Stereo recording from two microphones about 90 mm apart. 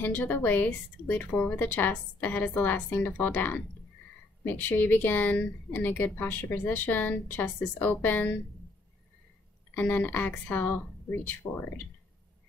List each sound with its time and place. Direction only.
0.0 s speech: 20° left (ahead or behind)
9.8 s speech: 20° left (ahead or behind)